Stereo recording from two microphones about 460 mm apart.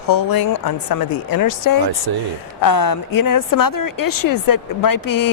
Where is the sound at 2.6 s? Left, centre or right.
Left.